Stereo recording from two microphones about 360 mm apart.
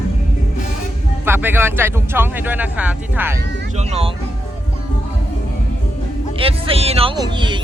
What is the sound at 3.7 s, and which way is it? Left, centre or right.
Speech, centre.